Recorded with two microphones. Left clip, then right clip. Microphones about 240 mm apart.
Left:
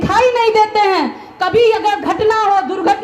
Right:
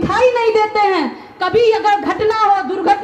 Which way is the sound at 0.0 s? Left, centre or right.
Left.